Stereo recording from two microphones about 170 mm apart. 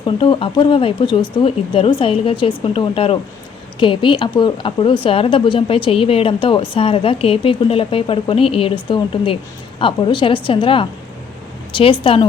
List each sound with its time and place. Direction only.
0.0 s a woman's voice: 30° left (ahead or behind)